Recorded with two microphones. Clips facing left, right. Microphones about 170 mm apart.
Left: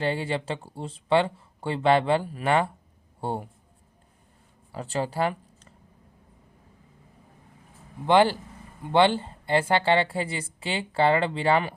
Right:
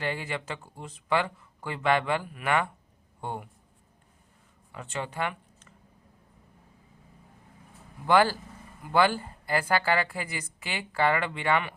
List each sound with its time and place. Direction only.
0.0 s speech: 30° left (ahead or behind)
4.7 s speech: 35° left (ahead or behind)
8.0 s a woman's voice: 20° left (ahead or behind)